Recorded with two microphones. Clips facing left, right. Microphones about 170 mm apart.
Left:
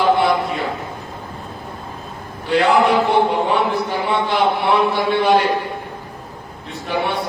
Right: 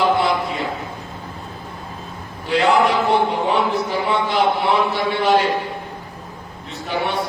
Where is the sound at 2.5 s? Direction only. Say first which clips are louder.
Left 2 dB; 60° left (ahead or behind).